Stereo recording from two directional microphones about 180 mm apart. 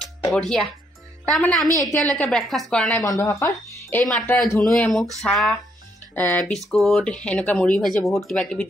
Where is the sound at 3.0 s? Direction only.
20° left (ahead or behind).